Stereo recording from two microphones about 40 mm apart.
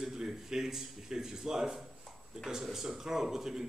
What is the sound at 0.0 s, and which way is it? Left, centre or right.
Speech, centre.